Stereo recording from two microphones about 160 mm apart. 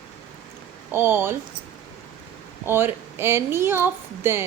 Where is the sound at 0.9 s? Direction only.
15° right (ahead or behind).